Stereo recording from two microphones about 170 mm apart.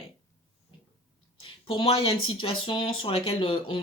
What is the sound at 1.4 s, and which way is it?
Speech, 30° left (ahead or behind).